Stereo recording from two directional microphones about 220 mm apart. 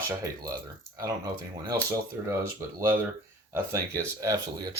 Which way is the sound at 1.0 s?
15° right (ahead or behind).